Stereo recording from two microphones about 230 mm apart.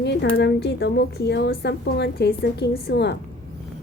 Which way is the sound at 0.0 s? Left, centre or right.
Left.